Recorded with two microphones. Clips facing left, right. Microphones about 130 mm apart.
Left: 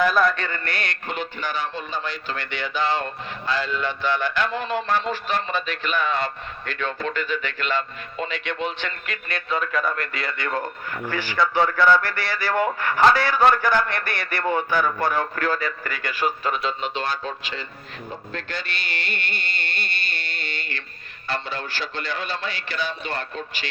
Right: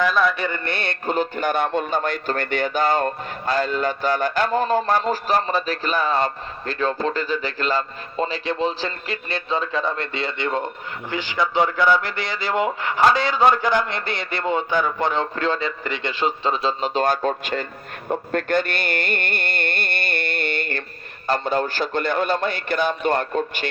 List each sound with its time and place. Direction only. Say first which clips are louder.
0.0 s music: even; centre (ahead or behind)
0.3 s a man's voice: right 4 dB; 15° right (ahead or behind)
1.0 s a man's voice: right 11 dB; 40° right (ahead or behind)
18.3 s music: right 12 dB; 50° right (ahead or behind)
21.2 s a man's voice: right 8 dB; 45° right (ahead or behind)